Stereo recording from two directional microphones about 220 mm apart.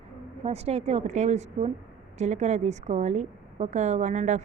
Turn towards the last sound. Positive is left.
turn(degrees=-35)  # may be behind; listen again after turning